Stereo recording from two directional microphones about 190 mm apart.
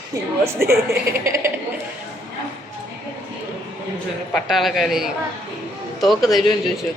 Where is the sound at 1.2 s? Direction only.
15° right (ahead or behind).